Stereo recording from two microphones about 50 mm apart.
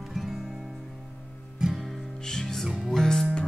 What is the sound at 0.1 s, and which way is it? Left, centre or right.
Music, centre.